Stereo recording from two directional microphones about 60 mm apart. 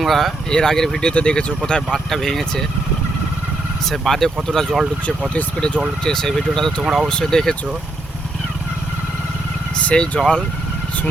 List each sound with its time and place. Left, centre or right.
0.0 s speech: centre
2.0 s speech: centre
3.8 s speech: centre
6.8 s speech: centre
7.1 s speech: centre
9.8 s speech: centre